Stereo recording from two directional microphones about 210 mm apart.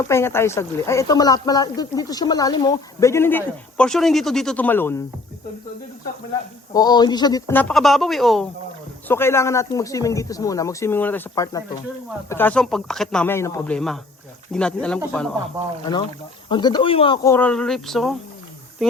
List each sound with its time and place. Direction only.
0.0 s speech: 10° left (ahead or behind)
6.7 s speech: 20° left (ahead or behind); by 8.4 s centre (ahead or behind)
9.0 s a man's voice: 10° left (ahead or behind)
16.5 s speech: 20° left (ahead or behind)
17.2 s a man's voice: 10° left (ahead or behind)